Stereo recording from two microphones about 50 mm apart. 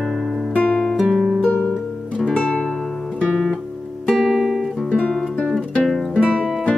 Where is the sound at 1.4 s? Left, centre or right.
Left.